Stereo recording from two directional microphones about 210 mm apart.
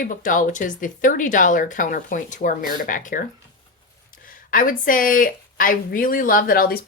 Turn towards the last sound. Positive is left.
turn(degrees=45)  # may be behind; listen again after turning